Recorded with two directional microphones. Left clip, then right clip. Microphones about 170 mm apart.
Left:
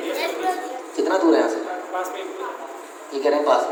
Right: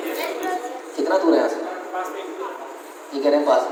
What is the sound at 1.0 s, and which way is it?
Speech, 35° left (ahead or behind).